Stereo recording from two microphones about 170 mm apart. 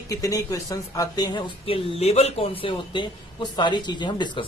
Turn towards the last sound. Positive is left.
turn(degrees=25)  # may be behind; listen again after turning